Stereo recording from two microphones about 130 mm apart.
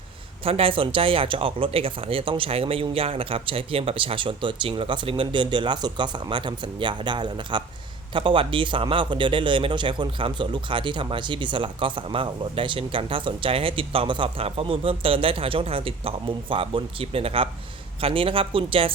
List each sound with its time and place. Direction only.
0.4 s a man's voice: 45° right (ahead or behind)